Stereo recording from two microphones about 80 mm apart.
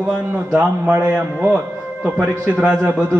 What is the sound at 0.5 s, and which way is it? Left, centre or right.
A man's voice, centre.